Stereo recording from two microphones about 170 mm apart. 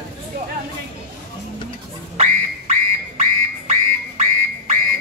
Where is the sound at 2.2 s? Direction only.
45° right (ahead or behind).